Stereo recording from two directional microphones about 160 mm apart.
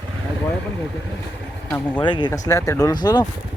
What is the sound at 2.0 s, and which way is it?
Speech, 30° left (ahead or behind).